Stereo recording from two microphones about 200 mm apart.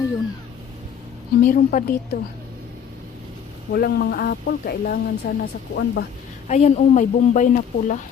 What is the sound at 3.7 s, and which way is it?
Speech, 50° left (ahead or behind).